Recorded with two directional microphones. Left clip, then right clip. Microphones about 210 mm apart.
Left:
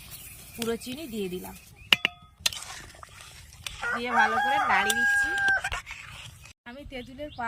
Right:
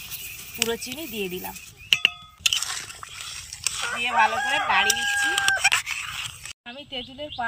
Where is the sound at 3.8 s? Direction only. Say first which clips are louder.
Right 3 dB; 25° right (ahead or behind).